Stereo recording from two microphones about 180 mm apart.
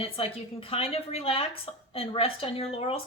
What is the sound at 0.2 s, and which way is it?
Speech, 35° left (ahead or behind).